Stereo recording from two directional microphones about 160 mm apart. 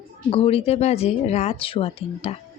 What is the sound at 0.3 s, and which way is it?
A woman's voice, 35° left (ahead or behind).